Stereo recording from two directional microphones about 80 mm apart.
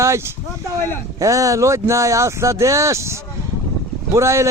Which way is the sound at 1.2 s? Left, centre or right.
Right.